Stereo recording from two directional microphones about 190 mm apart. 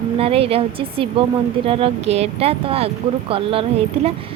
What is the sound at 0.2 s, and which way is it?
Speech, 30° right (ahead or behind).